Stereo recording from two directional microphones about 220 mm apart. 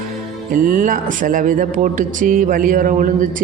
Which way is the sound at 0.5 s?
40° right (ahead or behind).